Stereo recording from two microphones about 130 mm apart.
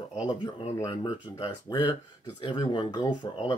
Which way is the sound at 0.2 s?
35° left (ahead or behind).